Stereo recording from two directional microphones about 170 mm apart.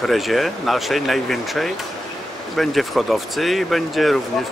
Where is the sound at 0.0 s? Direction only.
Centre (ahead or behind).